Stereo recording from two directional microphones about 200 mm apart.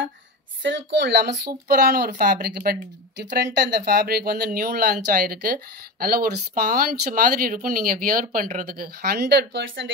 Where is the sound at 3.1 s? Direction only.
60° right (ahead or behind).